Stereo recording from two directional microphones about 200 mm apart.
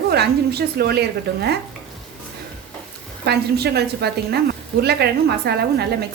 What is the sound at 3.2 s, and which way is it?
A woman's voice, 55° right (ahead or behind).